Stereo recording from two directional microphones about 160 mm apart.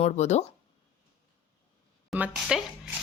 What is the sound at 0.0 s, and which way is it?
Speech, 45° left (ahead or behind).